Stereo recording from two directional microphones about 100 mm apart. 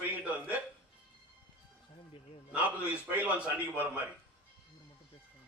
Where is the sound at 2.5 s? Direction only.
15° right (ahead or behind).